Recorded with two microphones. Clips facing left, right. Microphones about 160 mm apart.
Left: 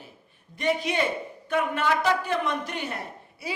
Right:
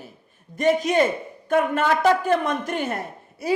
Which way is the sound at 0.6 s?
45° right (ahead or behind).